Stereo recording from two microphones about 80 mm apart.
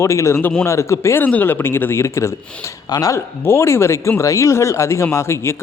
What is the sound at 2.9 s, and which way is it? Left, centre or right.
Speech, left.